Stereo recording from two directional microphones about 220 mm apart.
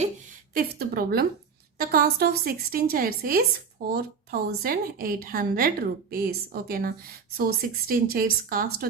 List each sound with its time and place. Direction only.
0.5 s a woman's voice: 45° right (ahead or behind)